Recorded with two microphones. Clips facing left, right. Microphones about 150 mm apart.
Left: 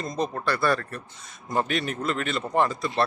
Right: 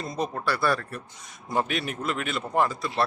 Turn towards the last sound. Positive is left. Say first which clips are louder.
# left 1 dB
turn(degrees=-5)  # may be behind; listen again after turning